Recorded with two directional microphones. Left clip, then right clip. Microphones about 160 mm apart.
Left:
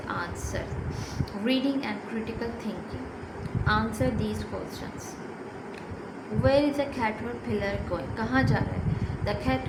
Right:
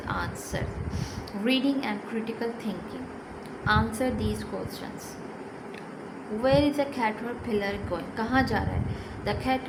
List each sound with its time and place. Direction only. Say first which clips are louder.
0.1 s vehicle: right 1 dB; 30° right (ahead or behind)
1.2 s a woman's voice: right 1 dB; 30° right (ahead or behind)
3.7 s a woman's voice: right 1 dB; 30° right (ahead or behind)
6.4 s a woman's voice: even; 25° right (ahead or behind)